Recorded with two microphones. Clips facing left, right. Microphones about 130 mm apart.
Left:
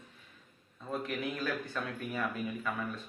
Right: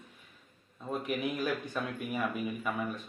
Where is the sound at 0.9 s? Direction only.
15° right (ahead or behind).